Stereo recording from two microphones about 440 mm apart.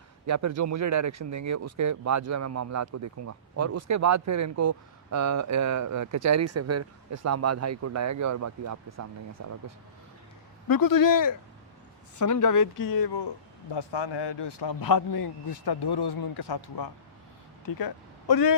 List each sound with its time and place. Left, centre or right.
0.3 s speech: right
10.7 s a man's voice: left